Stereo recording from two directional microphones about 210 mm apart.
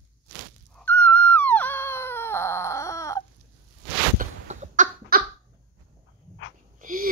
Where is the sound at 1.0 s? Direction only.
5° left (ahead or behind).